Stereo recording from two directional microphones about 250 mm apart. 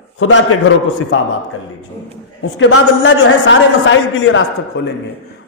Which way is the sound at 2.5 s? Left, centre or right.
Left.